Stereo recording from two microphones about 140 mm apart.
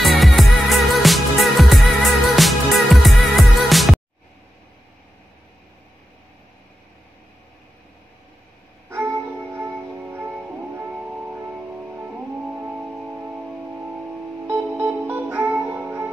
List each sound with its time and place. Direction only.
0.0 s music: centre (ahead or behind)
8.8 s music: 20° right (ahead or behind)
15.0 s music: 10° right (ahead or behind)